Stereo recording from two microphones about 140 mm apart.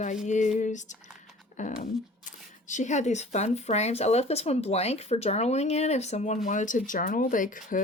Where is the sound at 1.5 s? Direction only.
65° left (ahead or behind).